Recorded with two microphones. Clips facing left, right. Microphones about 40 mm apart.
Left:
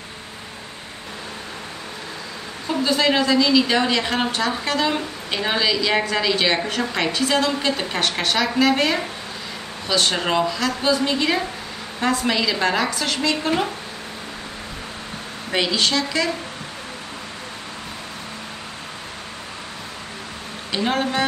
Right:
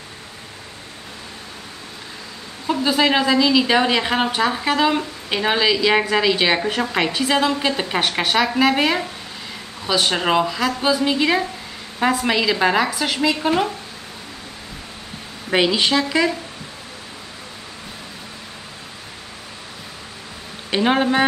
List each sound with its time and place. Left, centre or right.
2.7 s a woman's voice: centre
15.5 s a woman's voice: centre
20.7 s speech: right